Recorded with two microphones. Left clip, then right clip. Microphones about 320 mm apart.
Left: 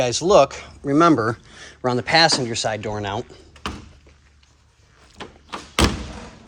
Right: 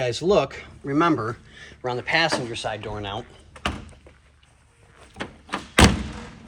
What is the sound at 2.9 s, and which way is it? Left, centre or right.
Speech, left.